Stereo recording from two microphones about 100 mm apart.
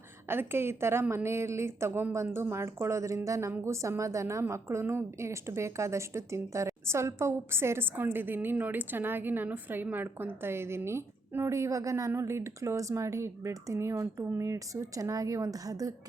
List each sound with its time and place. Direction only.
0.3 s a woman's voice: 25° right (ahead or behind)